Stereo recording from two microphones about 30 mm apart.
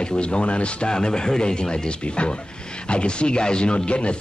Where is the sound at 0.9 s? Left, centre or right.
Left.